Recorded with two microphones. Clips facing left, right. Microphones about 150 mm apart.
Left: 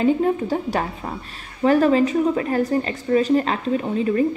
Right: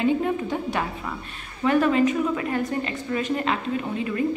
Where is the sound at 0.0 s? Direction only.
40° left (ahead or behind).